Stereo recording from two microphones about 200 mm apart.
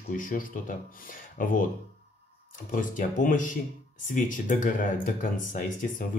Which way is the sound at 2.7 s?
40° left (ahead or behind).